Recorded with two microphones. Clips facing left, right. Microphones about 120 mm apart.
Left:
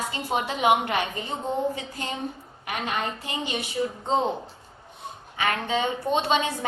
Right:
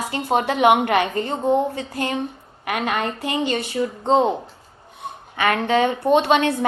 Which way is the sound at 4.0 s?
65° right (ahead or behind).